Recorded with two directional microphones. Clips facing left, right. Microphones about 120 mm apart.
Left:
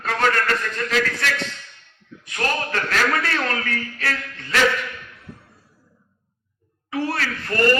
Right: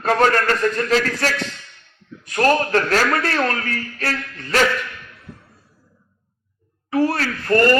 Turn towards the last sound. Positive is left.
turn(degrees=-40)  # may be behind; listen again after turning